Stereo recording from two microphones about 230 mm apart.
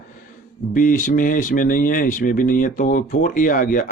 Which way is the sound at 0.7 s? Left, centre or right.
Left.